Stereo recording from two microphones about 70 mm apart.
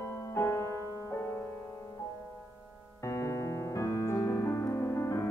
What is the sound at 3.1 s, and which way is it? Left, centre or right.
Piano, left.